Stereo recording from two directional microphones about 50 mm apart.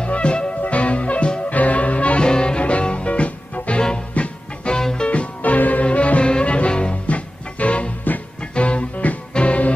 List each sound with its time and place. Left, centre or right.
0.0 s music: left